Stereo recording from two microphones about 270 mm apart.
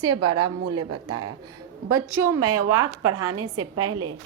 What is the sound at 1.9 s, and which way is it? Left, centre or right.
Speech, centre.